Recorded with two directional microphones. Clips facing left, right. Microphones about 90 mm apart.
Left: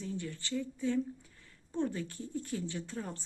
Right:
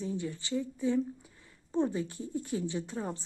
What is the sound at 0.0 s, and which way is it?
A woman's voice, 20° right (ahead or behind).